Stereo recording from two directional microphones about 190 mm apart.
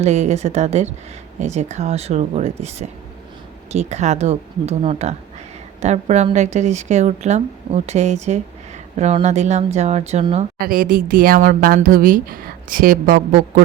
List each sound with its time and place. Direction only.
0.0 s a woman's voice: 35° right (ahead or behind)
10.6 s a woman's voice: 50° right (ahead or behind)